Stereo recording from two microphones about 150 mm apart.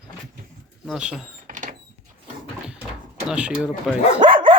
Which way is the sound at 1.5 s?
60° right (ahead or behind).